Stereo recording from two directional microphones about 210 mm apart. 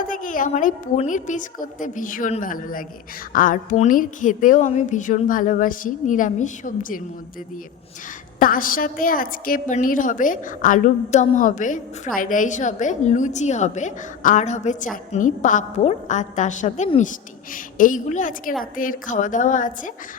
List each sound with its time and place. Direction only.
0.1 s a woman's voice: 40° left (ahead or behind)
8.4 s a woman's voice: 40° left (ahead or behind)